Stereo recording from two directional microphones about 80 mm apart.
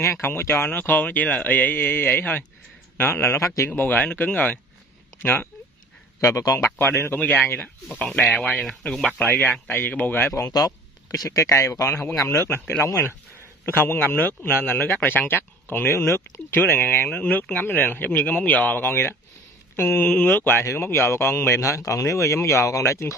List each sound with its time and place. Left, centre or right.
0.0 s speech: left
6.4 s speech: left
6.8 s speech: left
9.7 s speech: left
10.2 s speech: left
10.5 s speech: left